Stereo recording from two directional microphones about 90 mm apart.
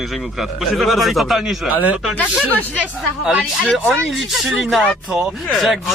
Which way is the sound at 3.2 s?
10° right (ahead or behind).